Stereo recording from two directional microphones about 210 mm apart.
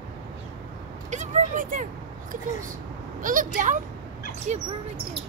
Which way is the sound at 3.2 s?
40° right (ahead or behind).